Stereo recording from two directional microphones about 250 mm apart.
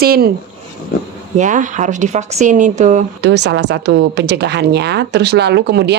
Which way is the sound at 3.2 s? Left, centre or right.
Right.